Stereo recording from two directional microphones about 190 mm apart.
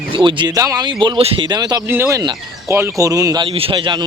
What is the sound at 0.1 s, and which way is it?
Speech, 25° right (ahead or behind).